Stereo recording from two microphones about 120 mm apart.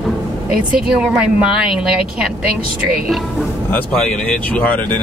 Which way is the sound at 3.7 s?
10° left (ahead or behind).